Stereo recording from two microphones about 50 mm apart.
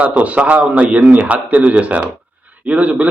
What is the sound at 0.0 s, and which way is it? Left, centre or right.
A man's voice, right.